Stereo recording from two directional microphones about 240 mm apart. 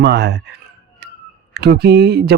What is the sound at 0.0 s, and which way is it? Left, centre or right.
Speech, right.